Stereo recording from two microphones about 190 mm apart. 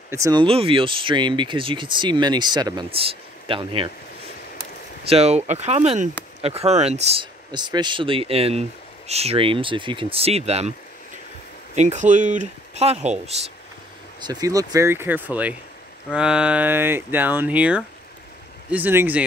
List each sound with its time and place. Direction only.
0.1 s speech: 20° right (ahead or behind)
5.0 s speech: 35° right (ahead or behind)
11.7 s speech: 40° right (ahead or behind)
14.2 s speech: 20° right (ahead or behind)